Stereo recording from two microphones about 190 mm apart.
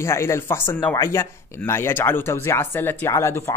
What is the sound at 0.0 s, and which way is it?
Speech, 15° left (ahead or behind).